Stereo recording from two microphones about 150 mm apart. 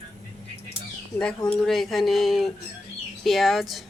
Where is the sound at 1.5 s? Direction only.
Centre (ahead or behind).